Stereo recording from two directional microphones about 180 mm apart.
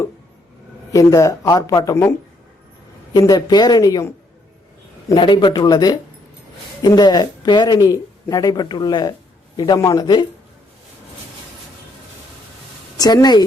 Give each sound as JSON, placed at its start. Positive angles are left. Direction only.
{"t": 0.9, "sound": "a woman's voice", "side_deg": 20}
{"t": 13.0, "sound": "a woman's voice", "side_deg": 20}